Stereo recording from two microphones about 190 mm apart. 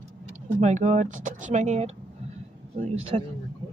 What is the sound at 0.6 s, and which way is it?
Speech, 40° right (ahead or behind).